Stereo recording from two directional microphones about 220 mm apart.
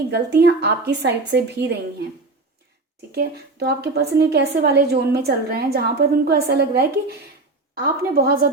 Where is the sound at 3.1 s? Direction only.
45° right (ahead or behind).